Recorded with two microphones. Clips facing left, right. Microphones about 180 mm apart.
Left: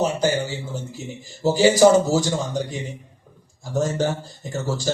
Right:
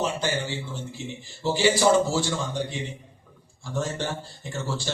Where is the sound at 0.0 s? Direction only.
40° left (ahead or behind).